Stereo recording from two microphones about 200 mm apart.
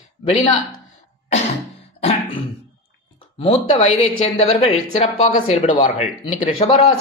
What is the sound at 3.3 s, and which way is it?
Speech, 30° left (ahead or behind).